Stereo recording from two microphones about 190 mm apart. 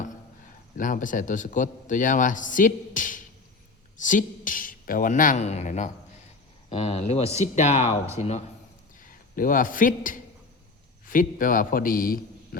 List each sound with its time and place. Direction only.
0.8 s a man's voice: 45° left (ahead or behind)
9.0 s a man's voice: 45° left (ahead or behind)